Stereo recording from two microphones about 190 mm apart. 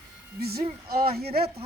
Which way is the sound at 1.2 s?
55° right (ahead or behind).